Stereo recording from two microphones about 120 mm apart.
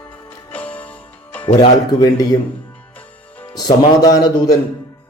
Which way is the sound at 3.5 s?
35° left (ahead or behind).